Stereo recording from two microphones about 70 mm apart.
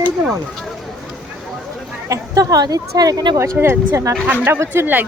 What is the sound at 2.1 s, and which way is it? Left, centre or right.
Speech, right.